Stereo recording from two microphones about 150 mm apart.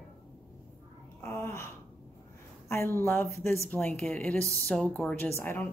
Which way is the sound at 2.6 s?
15° left (ahead or behind).